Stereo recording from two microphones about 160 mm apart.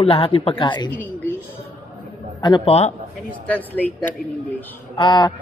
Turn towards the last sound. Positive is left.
turn(degrees=30)  # may be behind; listen again after turning